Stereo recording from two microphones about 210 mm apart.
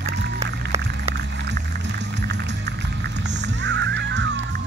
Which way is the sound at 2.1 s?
55° right (ahead or behind).